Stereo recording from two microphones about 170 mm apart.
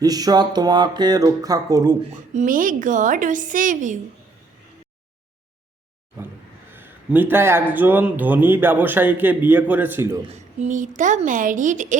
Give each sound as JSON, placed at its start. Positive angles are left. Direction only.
{"t": 0.0, "sound": "speech", "side_deg": -20}
{"t": 2.3, "sound": "a woman's voice", "side_deg": -50}
{"t": 6.7, "sound": "speech", "side_deg": -10}
{"t": 10.3, "sound": "a woman's voice", "side_deg": -45}